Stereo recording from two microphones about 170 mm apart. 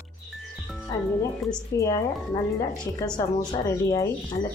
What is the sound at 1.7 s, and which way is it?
A woman's voice, 20° left (ahead or behind).